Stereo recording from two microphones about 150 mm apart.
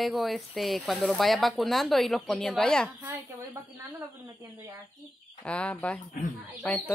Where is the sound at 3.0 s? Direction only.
15° right (ahead or behind).